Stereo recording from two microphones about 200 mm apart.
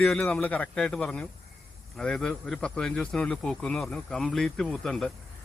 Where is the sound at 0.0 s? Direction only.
5° left (ahead or behind).